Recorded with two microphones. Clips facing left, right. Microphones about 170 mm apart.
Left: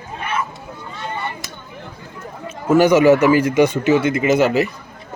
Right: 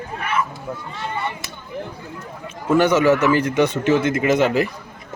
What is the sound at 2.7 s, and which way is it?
Speech, 10° left (ahead or behind).